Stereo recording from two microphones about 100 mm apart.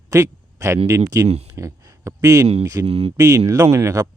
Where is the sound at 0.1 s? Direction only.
30° right (ahead or behind).